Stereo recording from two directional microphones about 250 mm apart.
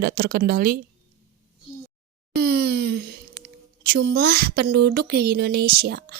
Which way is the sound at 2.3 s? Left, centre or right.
Right.